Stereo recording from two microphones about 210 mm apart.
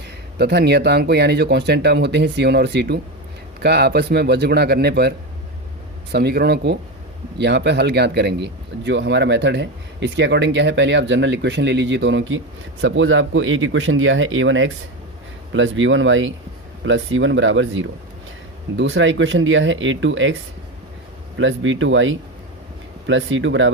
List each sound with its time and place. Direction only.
0.3 s speech: 50° right (ahead or behind)
21.3 s speech: 65° right (ahead or behind)